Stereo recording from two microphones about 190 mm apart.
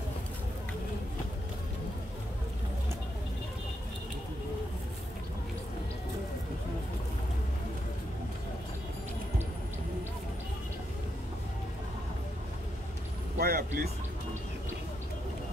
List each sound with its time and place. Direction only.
13.4 s speech: 55° right (ahead or behind)